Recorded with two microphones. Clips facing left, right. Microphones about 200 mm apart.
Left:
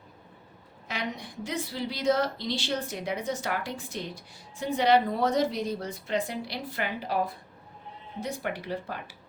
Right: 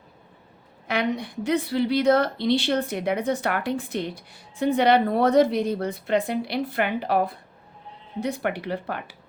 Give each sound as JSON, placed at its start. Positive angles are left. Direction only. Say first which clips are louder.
{"t": 0.9, "sound": "a woman's voice", "louder": "right 9 dB", "side_deg": -65}